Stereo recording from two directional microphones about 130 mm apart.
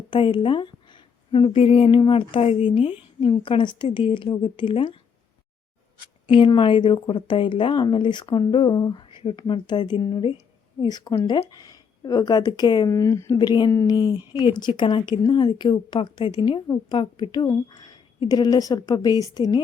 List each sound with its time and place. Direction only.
0.1 s a woman's voice: 40° left (ahead or behind)
6.3 s a woman's voice: 40° left (ahead or behind); by 13.4 s 25° left (ahead or behind)
13.4 s a woman's voice: 35° left (ahead or behind)